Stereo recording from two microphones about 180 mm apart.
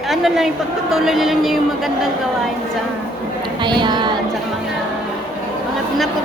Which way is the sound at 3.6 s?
25° right (ahead or behind).